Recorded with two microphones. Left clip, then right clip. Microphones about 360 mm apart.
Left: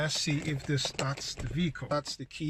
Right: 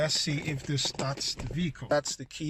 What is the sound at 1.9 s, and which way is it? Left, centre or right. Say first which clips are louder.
Speech: right 7 dB; centre.